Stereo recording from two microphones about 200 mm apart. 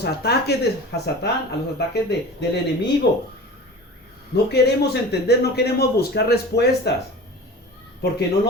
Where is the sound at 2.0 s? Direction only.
60° left (ahead or behind).